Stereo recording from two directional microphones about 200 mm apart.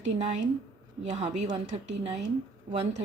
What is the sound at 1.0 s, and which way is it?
A woman's voice, 35° right (ahead or behind).